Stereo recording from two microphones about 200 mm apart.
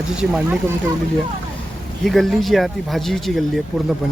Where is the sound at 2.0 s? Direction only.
Centre (ahead or behind).